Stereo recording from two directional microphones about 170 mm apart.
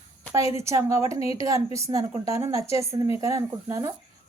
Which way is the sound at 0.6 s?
15° right (ahead or behind).